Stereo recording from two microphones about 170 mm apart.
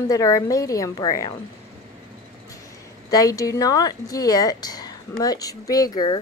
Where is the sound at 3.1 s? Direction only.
20° left (ahead or behind).